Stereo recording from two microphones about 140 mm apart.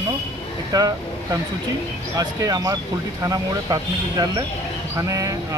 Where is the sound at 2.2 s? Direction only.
25° right (ahead or behind).